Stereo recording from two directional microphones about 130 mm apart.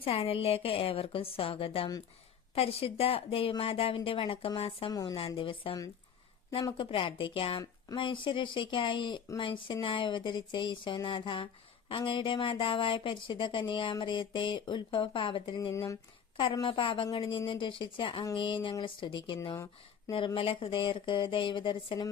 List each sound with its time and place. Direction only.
0.0 s a woman's voice: 45° left (ahead or behind)
4.9 s speech: 30° left (ahead or behind)
5.1 s a woman's voice: 45° left (ahead or behind)